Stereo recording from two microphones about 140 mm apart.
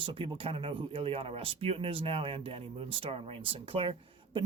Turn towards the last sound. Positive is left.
turn(degrees=-35)  # may be behind; listen again after turning